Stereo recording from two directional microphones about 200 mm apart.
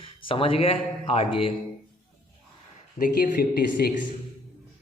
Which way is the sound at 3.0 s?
50° left (ahead or behind).